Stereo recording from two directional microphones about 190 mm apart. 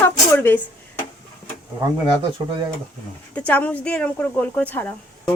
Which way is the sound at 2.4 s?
25° right (ahead or behind).